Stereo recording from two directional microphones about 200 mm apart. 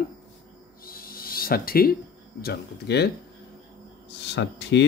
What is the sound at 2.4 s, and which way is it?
Speech, 55° left (ahead or behind).